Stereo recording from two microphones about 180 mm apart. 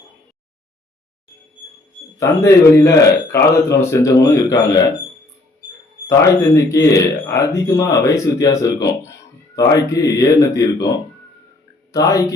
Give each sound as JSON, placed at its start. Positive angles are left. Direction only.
{"t": 2.1, "sound": "speech", "side_deg": 15}
{"t": 6.6, "sound": "speech", "side_deg": 15}